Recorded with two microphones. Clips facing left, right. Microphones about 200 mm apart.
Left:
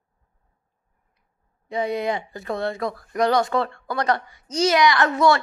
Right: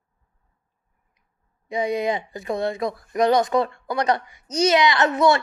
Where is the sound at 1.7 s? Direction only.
15° right (ahead or behind).